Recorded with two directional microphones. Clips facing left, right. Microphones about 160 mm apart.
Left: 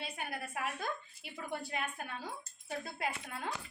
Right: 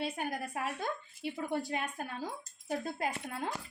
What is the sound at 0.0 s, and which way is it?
Speech, 40° right (ahead or behind).